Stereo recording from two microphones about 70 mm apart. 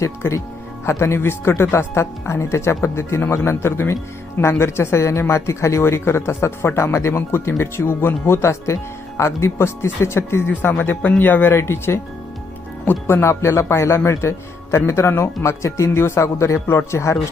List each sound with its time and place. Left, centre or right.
0.0 s speech: left
11.5 s speech: left